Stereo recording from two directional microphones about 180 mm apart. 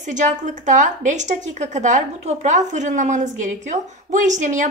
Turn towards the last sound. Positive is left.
turn(degrees=-45)  # may be behind; listen again after turning